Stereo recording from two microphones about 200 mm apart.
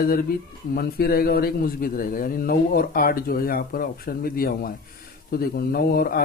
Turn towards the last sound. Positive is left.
turn(degrees=50)  # may be behind; listen again after turning